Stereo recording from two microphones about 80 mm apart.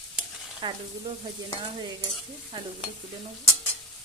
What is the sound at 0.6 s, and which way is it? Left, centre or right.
Frying, right.